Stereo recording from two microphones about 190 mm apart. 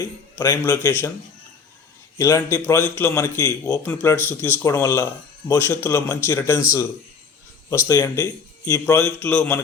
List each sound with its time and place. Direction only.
0.0 s a man's voice: 20° left (ahead or behind)
2.1 s a man's voice: 15° left (ahead or behind)